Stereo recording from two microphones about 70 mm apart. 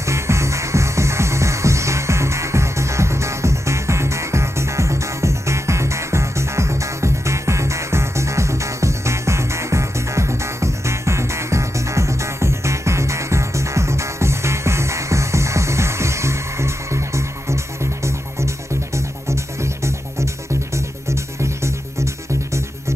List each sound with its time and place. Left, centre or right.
0.0 s music: right
18.9 s music: right